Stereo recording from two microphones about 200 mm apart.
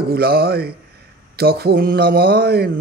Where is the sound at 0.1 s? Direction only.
50° right (ahead or behind).